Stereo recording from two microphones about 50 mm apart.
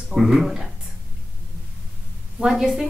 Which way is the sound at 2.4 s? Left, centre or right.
Centre.